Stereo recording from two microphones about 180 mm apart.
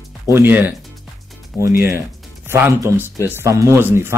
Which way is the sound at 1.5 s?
15° left (ahead or behind).